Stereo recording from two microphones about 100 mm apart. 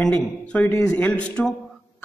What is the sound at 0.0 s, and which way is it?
A man's voice, 10° left (ahead or behind).